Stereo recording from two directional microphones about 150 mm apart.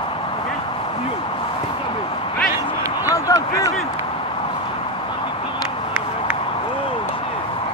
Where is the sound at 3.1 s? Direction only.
20° left (ahead or behind).